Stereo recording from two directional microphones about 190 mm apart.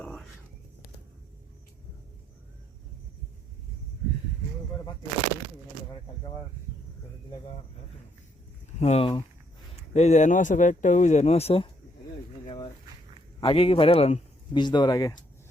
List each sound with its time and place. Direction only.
0.0 s whispering: 5° left (ahead or behind)
8.8 s speech: 30° left (ahead or behind)
13.4 s speech: 30° left (ahead or behind)